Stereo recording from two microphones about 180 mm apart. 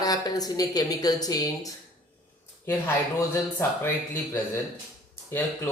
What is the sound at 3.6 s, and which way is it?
Speech, 15° left (ahead or behind).